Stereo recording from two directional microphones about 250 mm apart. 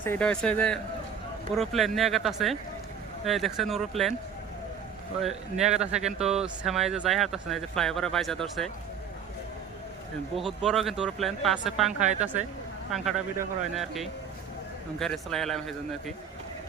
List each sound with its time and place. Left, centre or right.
0.0 s speech: centre
5.2 s speech: centre
10.3 s speech: centre